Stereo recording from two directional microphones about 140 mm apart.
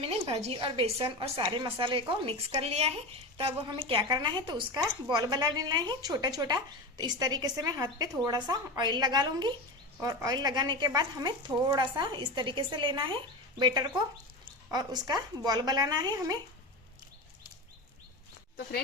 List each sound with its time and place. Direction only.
0.0 s a woman's voice: 40° right (ahead or behind)